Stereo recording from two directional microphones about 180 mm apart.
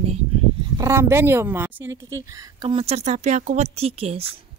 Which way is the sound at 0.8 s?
15° right (ahead or behind).